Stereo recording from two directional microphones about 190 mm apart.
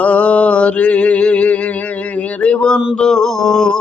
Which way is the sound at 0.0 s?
5° left (ahead or behind).